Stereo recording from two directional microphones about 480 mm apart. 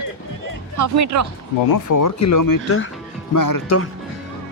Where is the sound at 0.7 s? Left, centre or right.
Right.